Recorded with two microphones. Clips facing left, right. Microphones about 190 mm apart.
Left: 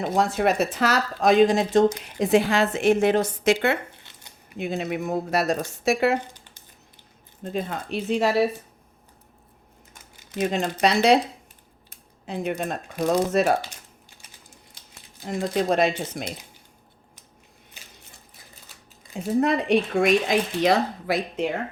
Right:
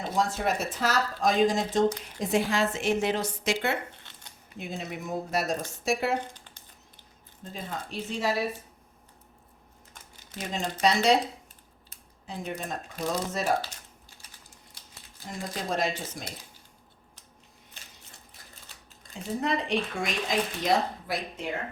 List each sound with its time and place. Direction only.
0.0 s speech: 55° left (ahead or behind)
4.5 s speech: 70° left (ahead or behind)
7.4 s speech: 65° left (ahead or behind)
10.3 s speech: 70° left (ahead or behind)
12.2 s speech: 70° left (ahead or behind)
15.3 s speech: 70° left (ahead or behind)
19.1 s speech: 60° left (ahead or behind); by 21.4 s 75° left (ahead or behind)